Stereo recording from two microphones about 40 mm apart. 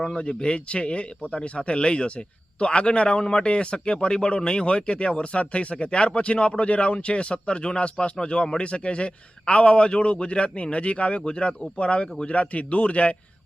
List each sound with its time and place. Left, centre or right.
0.2 s a man's voice: left